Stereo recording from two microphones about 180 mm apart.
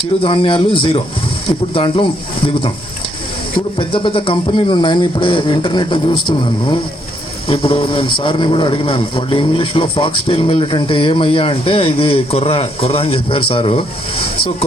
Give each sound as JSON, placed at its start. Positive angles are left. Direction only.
{"t": 0.2, "sound": "speech", "side_deg": 30}
{"t": 3.8, "sound": "speech", "side_deg": 30}